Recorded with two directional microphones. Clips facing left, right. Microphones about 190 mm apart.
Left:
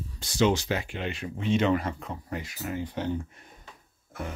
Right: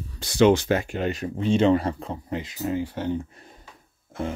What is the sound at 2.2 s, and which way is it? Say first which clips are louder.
Speech: right 7 dB; 20° right (ahead or behind).